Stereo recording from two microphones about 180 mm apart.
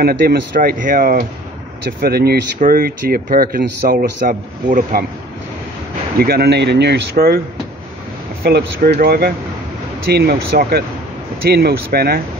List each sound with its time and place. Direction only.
0.0 s speech: 60° right (ahead or behind)
6.1 s speech: 60° right (ahead or behind)
8.8 s speech: 60° right (ahead or behind)